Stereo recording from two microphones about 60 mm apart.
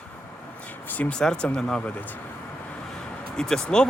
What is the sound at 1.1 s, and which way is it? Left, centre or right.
Speech, centre.